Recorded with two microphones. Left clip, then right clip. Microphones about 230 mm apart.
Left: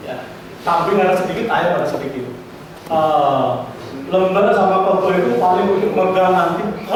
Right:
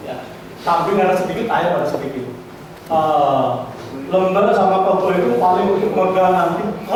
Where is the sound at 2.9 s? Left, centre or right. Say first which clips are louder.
Even; left.